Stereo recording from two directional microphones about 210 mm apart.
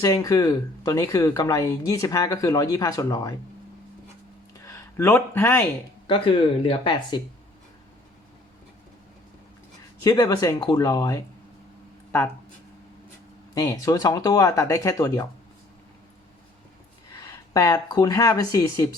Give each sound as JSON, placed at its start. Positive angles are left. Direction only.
{"t": 0.0, "sound": "speech", "side_deg": 15}
{"t": 4.5, "sound": "a sound", "side_deg": 15}
{"t": 6.1, "sound": "speech", "side_deg": 25}
{"t": 10.0, "sound": "speech", "side_deg": 15}
{"t": 13.5, "sound": "speech", "side_deg": 15}
{"t": 17.2, "sound": "speech", "side_deg": 15}